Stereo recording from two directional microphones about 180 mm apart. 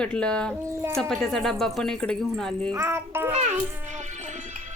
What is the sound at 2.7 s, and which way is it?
Speech, 15° right (ahead or behind).